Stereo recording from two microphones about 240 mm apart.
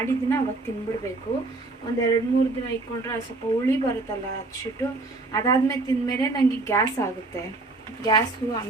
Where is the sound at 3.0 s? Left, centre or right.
Centre.